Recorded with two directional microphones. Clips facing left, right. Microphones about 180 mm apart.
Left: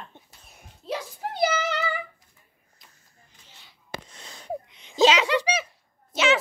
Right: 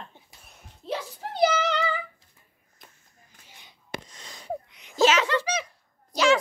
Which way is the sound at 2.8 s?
50° right (ahead or behind).